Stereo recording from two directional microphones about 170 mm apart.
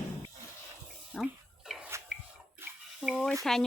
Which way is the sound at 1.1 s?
Centre (ahead or behind).